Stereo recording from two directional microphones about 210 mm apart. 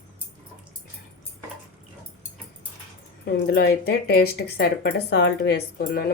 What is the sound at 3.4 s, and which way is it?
Speech, 50° left (ahead or behind).